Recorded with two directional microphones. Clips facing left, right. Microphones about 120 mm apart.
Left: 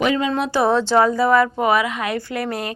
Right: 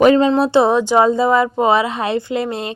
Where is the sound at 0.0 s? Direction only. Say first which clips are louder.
Right 8 dB; 40° right (ahead or behind).